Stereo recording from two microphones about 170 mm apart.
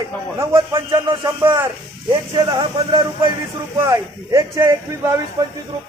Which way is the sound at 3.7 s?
15° right (ahead or behind).